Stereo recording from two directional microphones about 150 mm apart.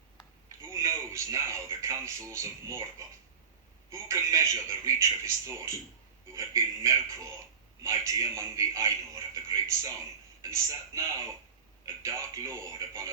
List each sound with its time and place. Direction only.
0.7 s speech: 20° right (ahead or behind)
3.9 s a man's voice: 20° right (ahead or behind)
12.0 s a man's voice: 20° right (ahead or behind)